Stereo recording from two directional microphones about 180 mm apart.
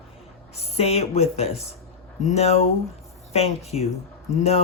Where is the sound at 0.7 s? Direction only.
35° left (ahead or behind).